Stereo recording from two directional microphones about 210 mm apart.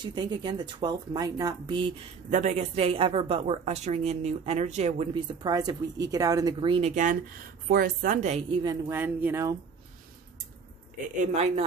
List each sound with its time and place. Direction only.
0.0 s a woman's voice: 20° right (ahead or behind)
7.6 s speech: 45° right (ahead or behind)
8.6 s speech: 10° right (ahead or behind)
11.1 s speech: 30° right (ahead or behind)